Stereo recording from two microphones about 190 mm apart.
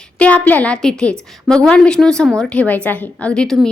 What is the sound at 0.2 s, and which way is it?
A woman's voice, 5° left (ahead or behind).